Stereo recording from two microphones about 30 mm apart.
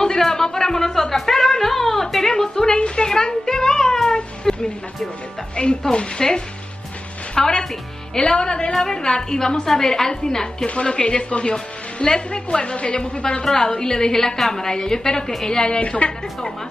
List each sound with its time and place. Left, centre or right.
0.2 s a sound: centre
3.4 s cat: centre
5.6 s a woman's voice: left
10.7 s a woman's voice: left
15.8 s a woman's voice: left